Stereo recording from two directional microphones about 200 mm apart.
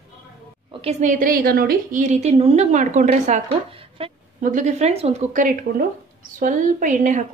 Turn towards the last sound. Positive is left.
turn(degrees=-40)  # may be behind; listen again after turning